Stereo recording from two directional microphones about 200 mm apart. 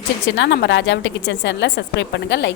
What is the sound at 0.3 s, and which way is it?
A woman's voice, 60° left (ahead or behind).